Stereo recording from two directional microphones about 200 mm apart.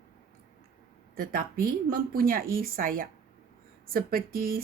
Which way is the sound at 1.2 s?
45° right (ahead or behind).